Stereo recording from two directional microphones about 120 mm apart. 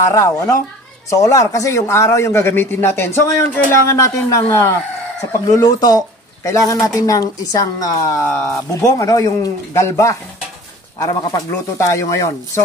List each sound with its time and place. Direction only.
0.1 s speech: 30° left (ahead or behind)
5.5 s speech: 35° left (ahead or behind)